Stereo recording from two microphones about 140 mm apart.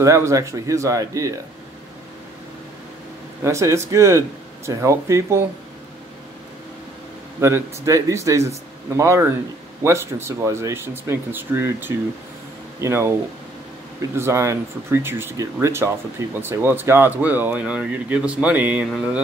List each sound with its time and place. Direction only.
0.0 s speech: 20° right (ahead or behind)
3.4 s speech: 20° right (ahead or behind)
7.3 s speech: 20° right (ahead or behind)
14.1 s speech: 20° right (ahead or behind)